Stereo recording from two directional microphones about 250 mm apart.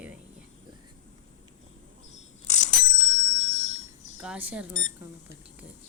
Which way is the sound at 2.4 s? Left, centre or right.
Left.